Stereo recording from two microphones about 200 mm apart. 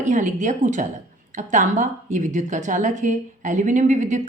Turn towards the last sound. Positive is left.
turn(degrees=-40)  # may be behind; listen again after turning